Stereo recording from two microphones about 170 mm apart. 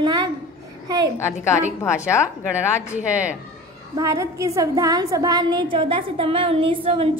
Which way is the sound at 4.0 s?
20° right (ahead or behind).